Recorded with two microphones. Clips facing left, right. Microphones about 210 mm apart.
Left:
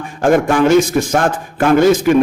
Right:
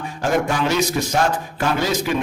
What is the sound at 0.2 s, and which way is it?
A man's voice, 50° left (ahead or behind).